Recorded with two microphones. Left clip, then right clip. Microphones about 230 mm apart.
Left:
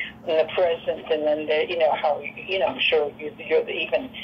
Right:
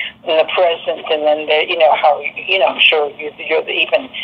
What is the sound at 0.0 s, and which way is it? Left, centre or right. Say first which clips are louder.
Speech: right 8 dB; right.